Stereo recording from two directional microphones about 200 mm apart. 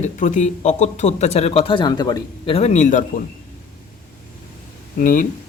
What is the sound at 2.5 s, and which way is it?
Speech, 35° left (ahead or behind).